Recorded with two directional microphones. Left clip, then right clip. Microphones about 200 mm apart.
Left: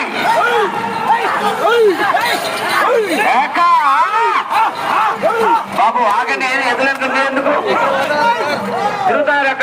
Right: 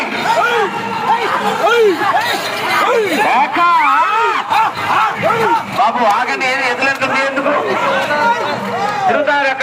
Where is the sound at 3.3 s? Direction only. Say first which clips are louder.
Left 1 dB; 50° left (ahead or behind); by 4.4 s 30° left (ahead or behind).